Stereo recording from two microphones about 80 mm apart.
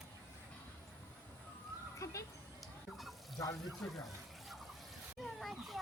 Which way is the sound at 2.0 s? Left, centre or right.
Left.